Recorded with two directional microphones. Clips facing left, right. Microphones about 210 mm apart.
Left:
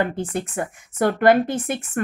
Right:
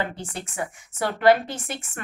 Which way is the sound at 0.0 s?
50° left (ahead or behind).